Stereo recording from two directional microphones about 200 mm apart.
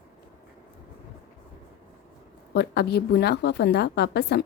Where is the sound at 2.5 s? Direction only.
55° left (ahead or behind).